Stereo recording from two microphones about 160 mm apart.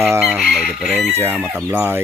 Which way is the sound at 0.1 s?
15° right (ahead or behind).